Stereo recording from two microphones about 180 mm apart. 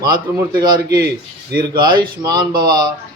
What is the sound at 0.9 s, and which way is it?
Speech, 60° right (ahead or behind).